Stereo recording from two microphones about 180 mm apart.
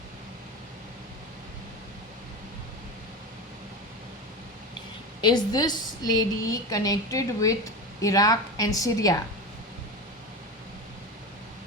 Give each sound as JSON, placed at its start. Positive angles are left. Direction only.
{"t": 5.2, "sound": "a woman's voice", "side_deg": 20}